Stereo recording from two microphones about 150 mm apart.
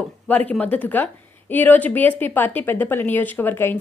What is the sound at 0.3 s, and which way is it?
A woman's voice, 10° left (ahead or behind).